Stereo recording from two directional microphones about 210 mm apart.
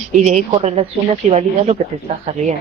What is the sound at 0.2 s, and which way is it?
Speech, 30° right (ahead or behind).